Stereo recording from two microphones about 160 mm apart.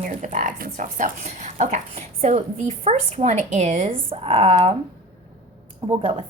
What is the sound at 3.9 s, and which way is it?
Speech, 35° right (ahead or behind).